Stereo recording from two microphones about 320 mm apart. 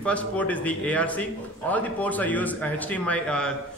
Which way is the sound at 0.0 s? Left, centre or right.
Centre.